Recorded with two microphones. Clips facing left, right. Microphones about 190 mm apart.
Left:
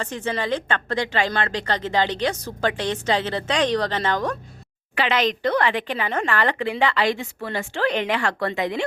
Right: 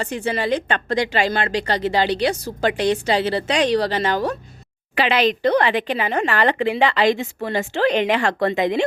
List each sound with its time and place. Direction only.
0.0 s a woman's voice: 10° right (ahead or behind)
5.5 s a woman's voice: 20° right (ahead or behind)